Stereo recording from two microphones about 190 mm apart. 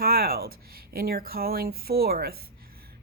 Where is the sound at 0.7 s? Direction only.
50° right (ahead or behind).